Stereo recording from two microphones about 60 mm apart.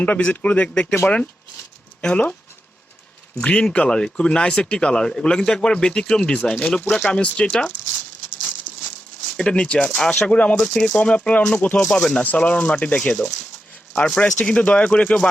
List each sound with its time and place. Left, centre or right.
0.0 s speech: left
3.4 s speech: centre
8.4 s a sound: left
10.2 s speech: centre
11.8 s speech: centre